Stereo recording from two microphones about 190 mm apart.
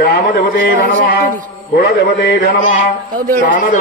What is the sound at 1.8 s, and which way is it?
Mantra, 60° left (ahead or behind).